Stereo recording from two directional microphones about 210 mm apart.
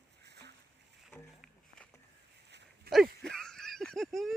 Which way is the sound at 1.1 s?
5° left (ahead or behind).